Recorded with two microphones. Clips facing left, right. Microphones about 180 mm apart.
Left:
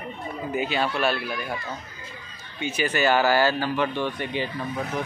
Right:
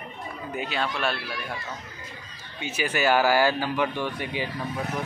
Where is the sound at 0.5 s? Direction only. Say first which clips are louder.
Left 4 dB; centre (ahead or behind).